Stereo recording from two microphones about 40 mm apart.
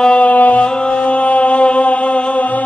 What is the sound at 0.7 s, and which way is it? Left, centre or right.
Music, left.